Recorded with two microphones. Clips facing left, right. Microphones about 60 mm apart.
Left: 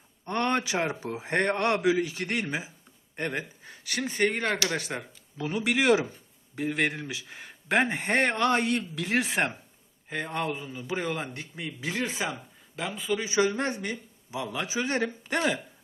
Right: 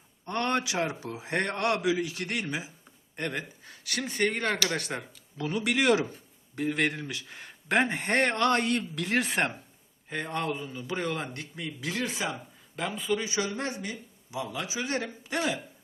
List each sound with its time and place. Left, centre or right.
0.3 s a man's voice: left; by 5.5 s centre
5.5 s speech: centre
11.5 s speech: left
12.7 s speech: centre
13.2 s a man's voice: left